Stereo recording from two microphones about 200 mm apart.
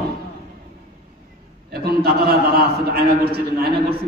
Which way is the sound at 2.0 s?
50° right (ahead or behind).